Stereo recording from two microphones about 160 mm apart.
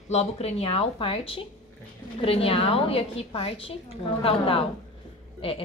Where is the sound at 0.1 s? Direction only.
40° left (ahead or behind).